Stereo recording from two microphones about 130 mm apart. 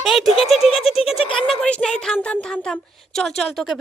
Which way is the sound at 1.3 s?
5° left (ahead or behind).